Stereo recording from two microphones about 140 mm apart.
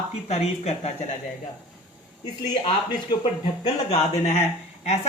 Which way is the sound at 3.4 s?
45° left (ahead or behind).